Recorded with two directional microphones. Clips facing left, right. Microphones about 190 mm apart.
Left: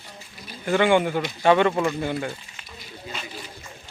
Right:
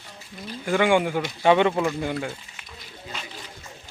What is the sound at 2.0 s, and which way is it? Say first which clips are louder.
Speech: left 1 dB; centre (ahead or behind).